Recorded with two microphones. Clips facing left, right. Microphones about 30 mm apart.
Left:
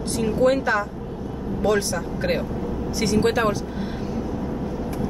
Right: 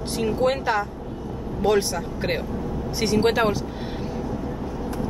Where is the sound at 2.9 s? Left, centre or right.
Centre.